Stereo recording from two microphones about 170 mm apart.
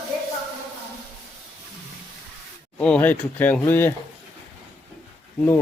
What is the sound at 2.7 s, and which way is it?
Speech, 10° left (ahead or behind).